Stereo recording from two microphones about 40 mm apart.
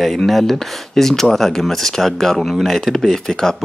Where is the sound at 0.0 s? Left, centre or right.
Centre.